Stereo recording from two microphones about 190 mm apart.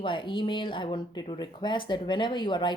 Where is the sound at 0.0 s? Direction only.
25° left (ahead or behind).